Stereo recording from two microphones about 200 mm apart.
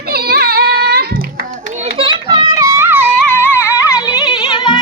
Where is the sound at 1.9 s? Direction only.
25° right (ahead or behind).